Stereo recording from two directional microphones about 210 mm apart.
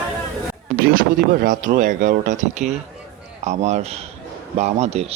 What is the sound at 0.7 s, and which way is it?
Speech, 45° right (ahead or behind).